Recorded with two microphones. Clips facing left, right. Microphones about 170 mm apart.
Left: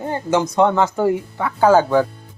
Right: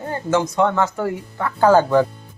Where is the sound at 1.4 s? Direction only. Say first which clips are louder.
Even; 10° left (ahead or behind).